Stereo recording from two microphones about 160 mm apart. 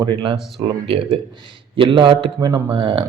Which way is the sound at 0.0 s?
30° right (ahead or behind).